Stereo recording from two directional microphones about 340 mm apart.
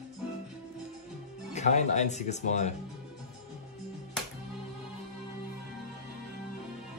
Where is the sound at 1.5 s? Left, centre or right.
Centre.